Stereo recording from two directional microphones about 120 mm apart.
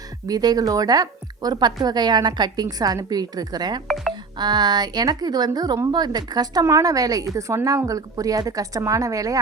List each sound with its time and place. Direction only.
0.3 s a woman's voice: 30° right (ahead or behind)
3.8 s music: centre (ahead or behind)
4.1 s speech: 35° right (ahead or behind)